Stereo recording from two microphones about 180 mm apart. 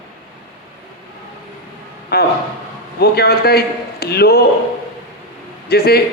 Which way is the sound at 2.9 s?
60° left (ahead or behind).